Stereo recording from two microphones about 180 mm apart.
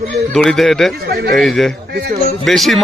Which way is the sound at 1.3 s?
Centre (ahead or behind).